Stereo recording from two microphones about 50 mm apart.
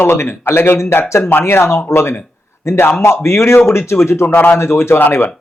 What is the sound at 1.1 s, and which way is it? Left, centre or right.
Speech, left.